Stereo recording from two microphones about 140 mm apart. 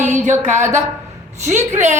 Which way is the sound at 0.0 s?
60° right (ahead or behind).